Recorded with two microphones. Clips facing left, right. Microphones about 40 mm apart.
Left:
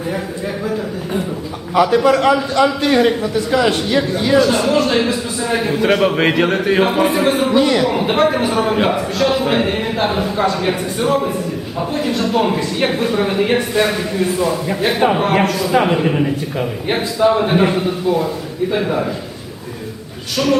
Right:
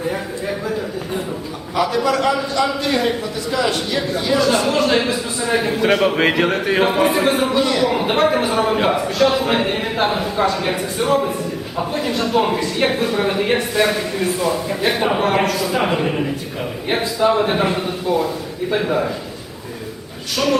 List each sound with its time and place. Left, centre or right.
1.7 s a man's voice: left
4.4 s speech: centre
7.5 s a man's voice: centre
7.9 s speech: centre
20.3 s speech: centre